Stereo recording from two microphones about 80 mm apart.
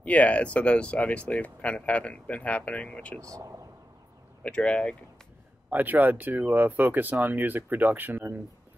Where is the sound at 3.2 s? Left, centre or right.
Right.